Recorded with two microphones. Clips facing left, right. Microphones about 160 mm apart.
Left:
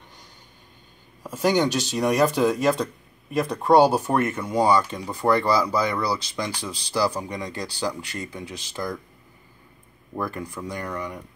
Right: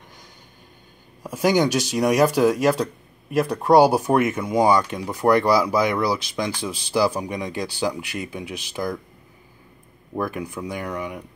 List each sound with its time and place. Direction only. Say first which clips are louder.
1.2 s speech: right 2 dB; 10° right (ahead or behind)
10.1 s speech: right 3 dB; 15° right (ahead or behind)